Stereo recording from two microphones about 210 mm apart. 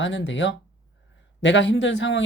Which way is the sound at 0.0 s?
60° left (ahead or behind).